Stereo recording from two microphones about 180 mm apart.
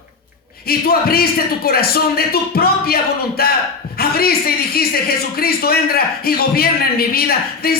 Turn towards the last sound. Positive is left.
turn(degrees=55)  # may be behind; listen again after turning